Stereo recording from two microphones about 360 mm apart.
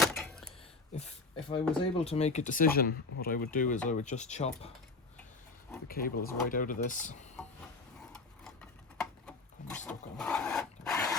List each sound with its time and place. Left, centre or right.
0.0 s a sound: centre
0.9 s speech: centre
5.9 s speech: left
9.0 s filing: centre